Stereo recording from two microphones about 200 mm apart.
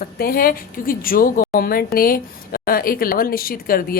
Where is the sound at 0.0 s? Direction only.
45° left (ahead or behind).